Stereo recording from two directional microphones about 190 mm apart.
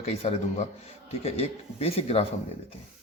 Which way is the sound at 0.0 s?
30° left (ahead or behind).